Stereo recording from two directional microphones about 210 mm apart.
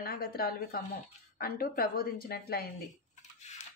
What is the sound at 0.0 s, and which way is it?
A woman's voice, 45° left (ahead or behind).